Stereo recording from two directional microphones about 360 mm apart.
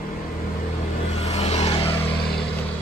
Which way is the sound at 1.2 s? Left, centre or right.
Centre.